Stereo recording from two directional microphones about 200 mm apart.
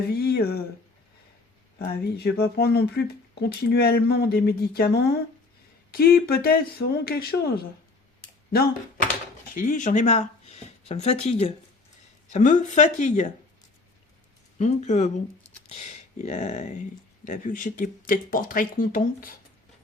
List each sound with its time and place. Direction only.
0.1 s speech: 50° left (ahead or behind)
1.8 s speech: 50° left (ahead or behind)
9.6 s speech: 40° left (ahead or behind)
14.6 s speech: 35° left (ahead or behind)